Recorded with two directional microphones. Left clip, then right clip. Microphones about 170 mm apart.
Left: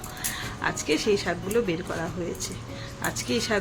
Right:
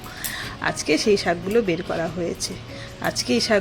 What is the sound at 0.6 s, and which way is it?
Speech, 25° right (ahead or behind).